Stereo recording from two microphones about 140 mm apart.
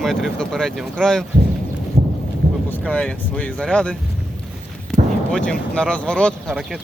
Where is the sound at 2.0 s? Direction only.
70° right (ahead or behind).